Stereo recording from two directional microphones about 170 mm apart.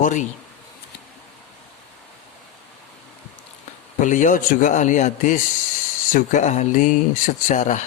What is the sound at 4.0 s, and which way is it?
Speech, 45° left (ahead or behind).